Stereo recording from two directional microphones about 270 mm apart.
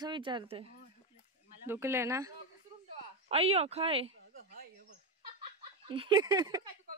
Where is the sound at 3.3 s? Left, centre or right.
Right.